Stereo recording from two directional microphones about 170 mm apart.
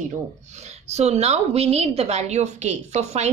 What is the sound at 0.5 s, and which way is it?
A woman's voice, 40° right (ahead or behind).